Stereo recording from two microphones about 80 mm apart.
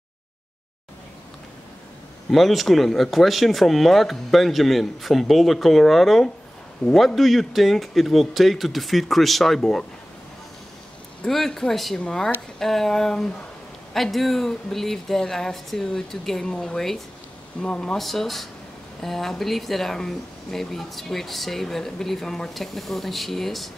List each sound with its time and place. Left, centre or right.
2.3 s speech: centre
11.2 s speech: centre